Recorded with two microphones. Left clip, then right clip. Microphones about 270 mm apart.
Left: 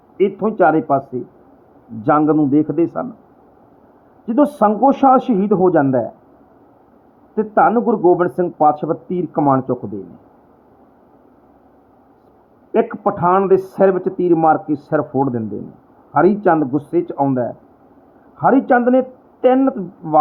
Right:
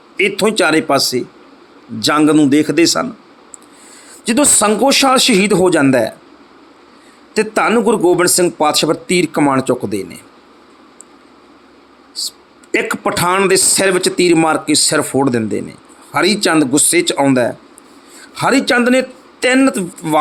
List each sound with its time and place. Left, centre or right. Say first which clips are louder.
0.2 s a man's voice: right 2 dB; right
2.1 s a man's voice: right 4 dB; right
4.3 s a man's voice: right 2 dB; right
7.3 s a man's voice: even; right
12.7 s a man's voice: right 1 dB; right